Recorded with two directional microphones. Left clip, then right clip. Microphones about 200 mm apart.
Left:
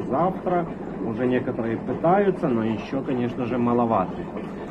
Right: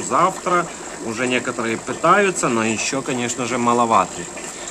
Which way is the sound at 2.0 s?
30° right (ahead or behind).